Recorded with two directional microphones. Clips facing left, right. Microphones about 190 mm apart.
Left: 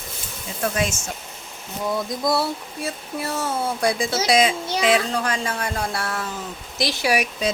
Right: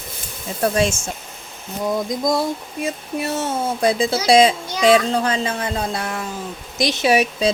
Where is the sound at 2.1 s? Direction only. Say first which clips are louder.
Right 3 dB; 15° right (ahead or behind).